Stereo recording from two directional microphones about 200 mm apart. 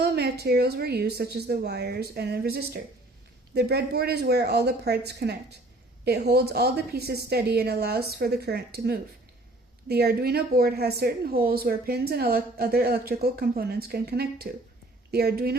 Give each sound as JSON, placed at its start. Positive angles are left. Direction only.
{"t": 0.0, "sound": "speech", "side_deg": -55}